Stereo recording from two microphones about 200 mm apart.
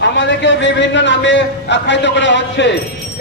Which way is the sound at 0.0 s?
65° left (ahead or behind).